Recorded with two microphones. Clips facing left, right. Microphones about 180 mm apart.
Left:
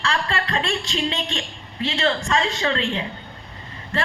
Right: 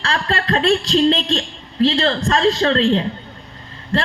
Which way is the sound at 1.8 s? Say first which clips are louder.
Right 6 dB; 35° right (ahead or behind).